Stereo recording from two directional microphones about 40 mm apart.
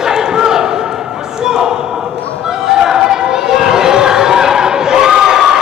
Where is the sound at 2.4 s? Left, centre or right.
Centre.